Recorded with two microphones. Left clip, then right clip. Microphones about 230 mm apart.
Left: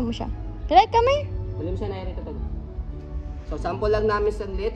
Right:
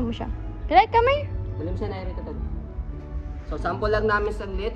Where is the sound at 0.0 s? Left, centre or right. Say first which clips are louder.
Left 1 dB; centre.